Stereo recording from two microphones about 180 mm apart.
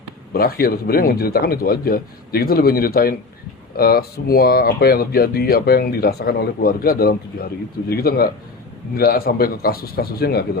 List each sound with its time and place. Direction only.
0.3 s speech: 60° left (ahead or behind)